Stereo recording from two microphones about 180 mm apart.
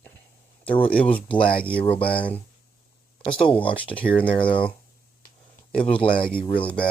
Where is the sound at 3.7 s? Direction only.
5° left (ahead or behind).